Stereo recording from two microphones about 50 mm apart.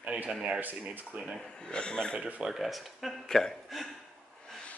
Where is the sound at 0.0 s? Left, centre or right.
Right.